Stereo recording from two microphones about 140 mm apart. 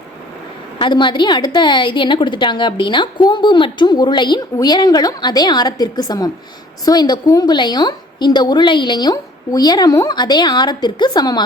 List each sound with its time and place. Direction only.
0.8 s a woman's voice: 35° left (ahead or behind)